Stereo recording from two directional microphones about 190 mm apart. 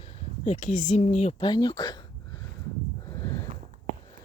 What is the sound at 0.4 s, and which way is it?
Speech, 40° left (ahead or behind).